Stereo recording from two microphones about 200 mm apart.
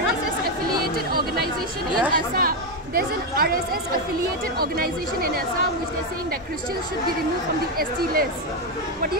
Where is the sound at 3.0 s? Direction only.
50° right (ahead or behind).